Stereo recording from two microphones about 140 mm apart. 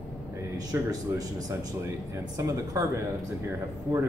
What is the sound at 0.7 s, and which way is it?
Speech, 25° right (ahead or behind).